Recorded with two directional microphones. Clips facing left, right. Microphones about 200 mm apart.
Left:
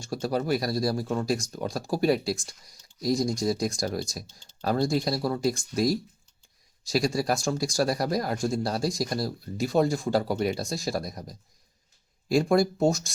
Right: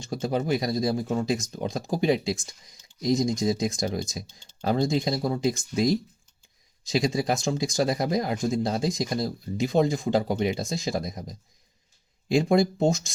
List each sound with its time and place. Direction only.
0.0 s speech: 20° right (ahead or behind)